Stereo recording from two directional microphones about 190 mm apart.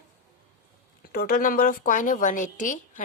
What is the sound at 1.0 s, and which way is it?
A woman's voice, 50° left (ahead or behind).